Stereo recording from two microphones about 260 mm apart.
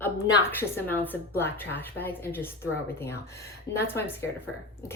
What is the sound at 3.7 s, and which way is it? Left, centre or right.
Speech, left.